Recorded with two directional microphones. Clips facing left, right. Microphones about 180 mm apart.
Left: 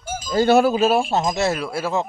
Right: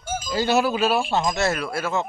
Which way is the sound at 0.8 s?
Centre (ahead or behind).